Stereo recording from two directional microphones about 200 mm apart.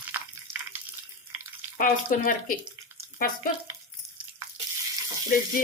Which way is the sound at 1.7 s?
40° left (ahead or behind).